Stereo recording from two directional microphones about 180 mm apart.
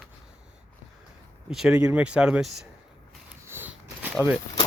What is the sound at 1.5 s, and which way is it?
Speech, 5° right (ahead or behind).